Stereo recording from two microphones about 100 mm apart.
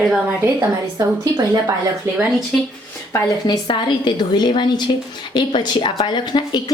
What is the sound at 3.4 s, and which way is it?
Speech, 45° left (ahead or behind).